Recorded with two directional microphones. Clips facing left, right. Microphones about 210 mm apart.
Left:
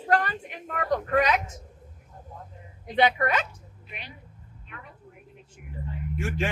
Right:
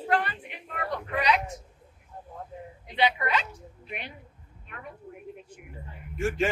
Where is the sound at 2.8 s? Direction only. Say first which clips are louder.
Left 4 dB; 45° left (ahead or behind).